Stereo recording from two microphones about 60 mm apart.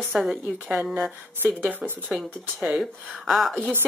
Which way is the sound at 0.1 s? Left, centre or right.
Centre.